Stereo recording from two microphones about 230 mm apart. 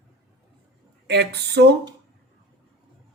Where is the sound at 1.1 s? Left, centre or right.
Right.